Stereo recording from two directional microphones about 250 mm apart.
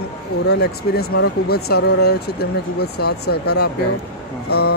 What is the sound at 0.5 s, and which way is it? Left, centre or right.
Speech, left.